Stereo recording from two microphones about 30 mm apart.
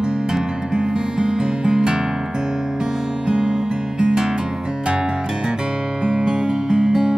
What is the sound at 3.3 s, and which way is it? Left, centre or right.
Music, right.